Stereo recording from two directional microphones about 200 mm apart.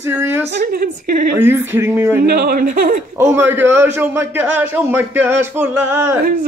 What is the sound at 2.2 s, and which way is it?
Speech, 50° right (ahead or behind).